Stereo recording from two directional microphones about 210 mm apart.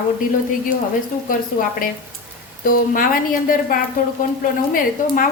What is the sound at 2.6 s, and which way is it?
Speech, 40° left (ahead or behind).